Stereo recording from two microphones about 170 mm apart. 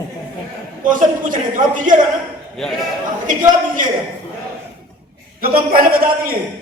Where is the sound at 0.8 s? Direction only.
50° right (ahead or behind).